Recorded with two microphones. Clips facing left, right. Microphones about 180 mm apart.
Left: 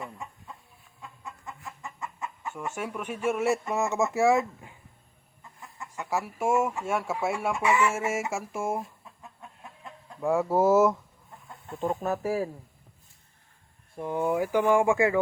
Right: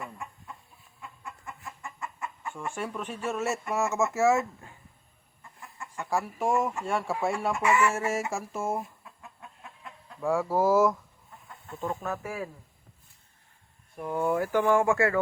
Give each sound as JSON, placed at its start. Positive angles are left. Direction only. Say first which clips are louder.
{"t": 1.8, "sound": "chicken", "louder": "left 1 dB", "side_deg": 20}
{"t": 2.6, "sound": "speech", "louder": "even", "side_deg": 10}
{"t": 5.8, "sound": "speech", "louder": "even", "side_deg": 10}
{"t": 10.2, "sound": "speech", "louder": "left 2 dB", "side_deg": 20}
{"t": 12.2, "sound": "speech", "louder": "left 7 dB", "side_deg": 35}
{"t": 13.9, "sound": "speech", "louder": "left 1 dB", "side_deg": 20}